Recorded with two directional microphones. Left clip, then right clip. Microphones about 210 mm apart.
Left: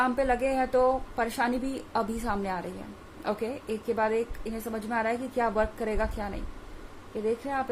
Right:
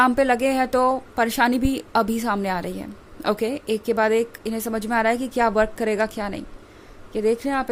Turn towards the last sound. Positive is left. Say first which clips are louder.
# right 8 dB
turn(degrees=-45)  # may be behind; listen again after turning